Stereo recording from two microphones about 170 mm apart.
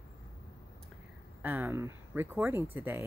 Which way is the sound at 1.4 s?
10° right (ahead or behind).